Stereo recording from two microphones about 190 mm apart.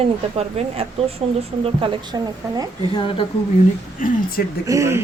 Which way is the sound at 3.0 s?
25° left (ahead or behind).